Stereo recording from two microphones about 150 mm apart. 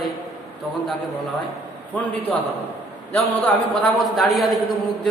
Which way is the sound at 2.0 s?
10° left (ahead or behind).